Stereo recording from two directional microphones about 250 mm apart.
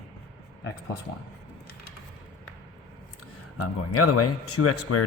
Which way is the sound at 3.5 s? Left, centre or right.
Left.